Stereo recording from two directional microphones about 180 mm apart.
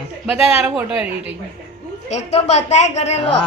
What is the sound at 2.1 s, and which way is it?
A woman's voice, 40° left (ahead or behind).